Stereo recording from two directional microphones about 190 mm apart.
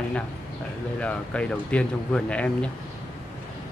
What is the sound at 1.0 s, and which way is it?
Speech, 5° left (ahead or behind).